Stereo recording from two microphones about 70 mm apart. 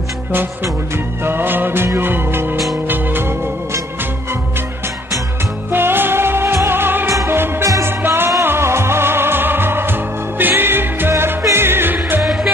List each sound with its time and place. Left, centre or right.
0.9 s music: right
5.7 s music: right
12.2 s music: centre